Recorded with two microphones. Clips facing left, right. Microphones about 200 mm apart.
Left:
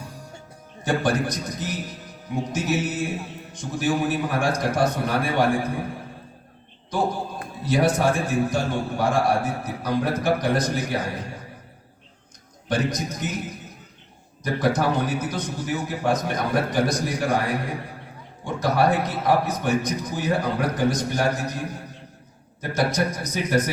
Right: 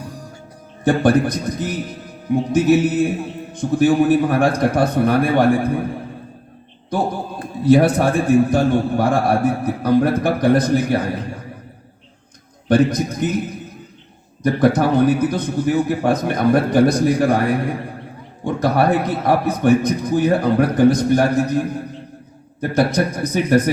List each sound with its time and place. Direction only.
0.9 s a man's voice: 55° right (ahead or behind)
6.9 s a man's voice: 55° right (ahead or behind)
12.6 s a man's voice: 55° right (ahead or behind)
14.4 s a man's voice: 55° right (ahead or behind)
22.7 s a man's voice: 55° right (ahead or behind)